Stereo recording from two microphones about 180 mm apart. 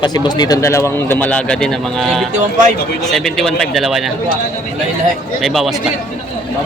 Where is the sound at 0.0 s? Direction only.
25° left (ahead or behind); by 4.1 s centre (ahead or behind).